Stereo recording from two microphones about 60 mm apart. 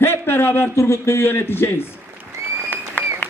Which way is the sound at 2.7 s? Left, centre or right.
Left.